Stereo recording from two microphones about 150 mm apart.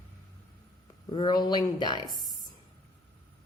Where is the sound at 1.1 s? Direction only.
30° left (ahead or behind).